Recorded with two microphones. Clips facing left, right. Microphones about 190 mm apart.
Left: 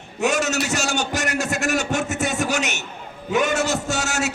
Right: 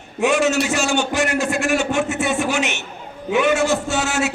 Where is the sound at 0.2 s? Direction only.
40° left (ahead or behind).